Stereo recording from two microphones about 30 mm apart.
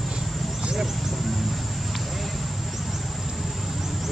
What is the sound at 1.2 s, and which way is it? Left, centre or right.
Vehicle, centre.